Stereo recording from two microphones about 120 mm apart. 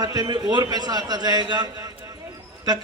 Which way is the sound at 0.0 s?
35° right (ahead or behind).